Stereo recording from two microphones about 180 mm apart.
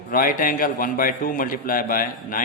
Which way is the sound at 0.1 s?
50° left (ahead or behind).